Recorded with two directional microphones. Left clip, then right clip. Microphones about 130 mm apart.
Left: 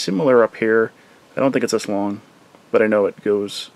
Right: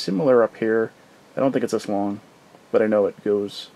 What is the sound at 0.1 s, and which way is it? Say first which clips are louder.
Speech: left 3 dB; 30° left (ahead or behind).